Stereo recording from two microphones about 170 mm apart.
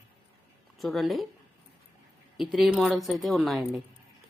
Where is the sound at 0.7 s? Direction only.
Centre (ahead or behind).